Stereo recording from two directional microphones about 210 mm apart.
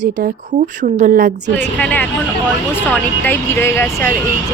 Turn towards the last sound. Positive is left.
turn(degrees=10)  # may be behind; listen again after turning